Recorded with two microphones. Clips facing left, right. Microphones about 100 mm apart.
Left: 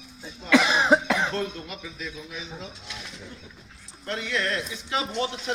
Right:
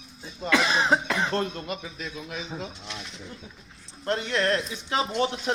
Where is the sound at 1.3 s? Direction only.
50° right (ahead or behind).